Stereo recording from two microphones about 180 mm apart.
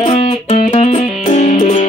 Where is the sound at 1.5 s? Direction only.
30° left (ahead or behind).